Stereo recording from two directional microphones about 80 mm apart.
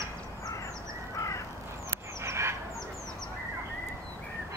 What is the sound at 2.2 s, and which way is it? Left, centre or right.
Fowl, right.